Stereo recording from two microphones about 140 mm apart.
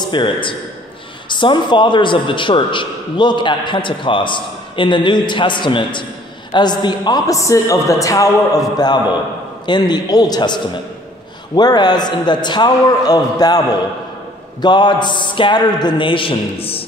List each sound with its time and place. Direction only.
0.0 s a man's voice: 35° left (ahead or behind)